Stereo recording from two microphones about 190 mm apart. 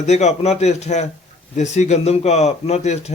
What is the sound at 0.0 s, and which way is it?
A man's voice, 35° left (ahead or behind).